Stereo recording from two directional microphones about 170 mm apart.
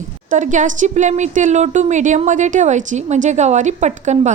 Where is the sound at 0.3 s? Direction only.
45° right (ahead or behind).